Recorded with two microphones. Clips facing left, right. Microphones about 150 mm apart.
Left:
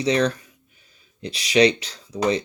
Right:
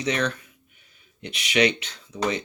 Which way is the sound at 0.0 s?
35° left (ahead or behind).